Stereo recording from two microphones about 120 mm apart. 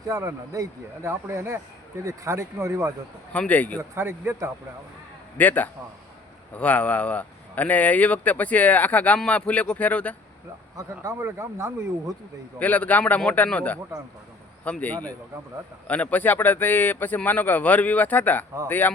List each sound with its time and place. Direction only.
0.1 s speech: 25° right (ahead or behind)
3.3 s speech: 10° left (ahead or behind)
3.9 s speech: 20° right (ahead or behind)
5.4 s speech: 15° left (ahead or behind)
10.8 s speech: 30° right (ahead or behind)
12.5 s speech: 10° left (ahead or behind)